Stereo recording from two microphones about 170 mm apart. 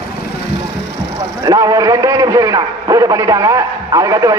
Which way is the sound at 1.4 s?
20° right (ahead or behind).